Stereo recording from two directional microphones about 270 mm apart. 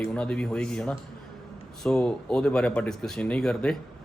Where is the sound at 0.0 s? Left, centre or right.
Centre.